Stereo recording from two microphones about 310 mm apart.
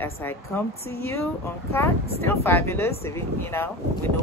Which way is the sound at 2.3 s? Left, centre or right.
Centre.